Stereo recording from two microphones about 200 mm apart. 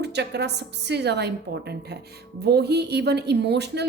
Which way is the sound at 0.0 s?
55° right (ahead or behind).